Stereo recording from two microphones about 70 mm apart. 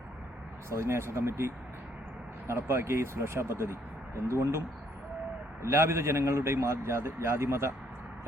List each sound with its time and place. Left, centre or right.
0.7 s speech: right
2.5 s speech: right
5.6 s speech: right